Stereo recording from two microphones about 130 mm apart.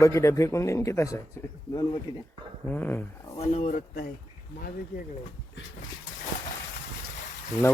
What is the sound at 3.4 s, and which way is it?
Speech, 65° left (ahead or behind).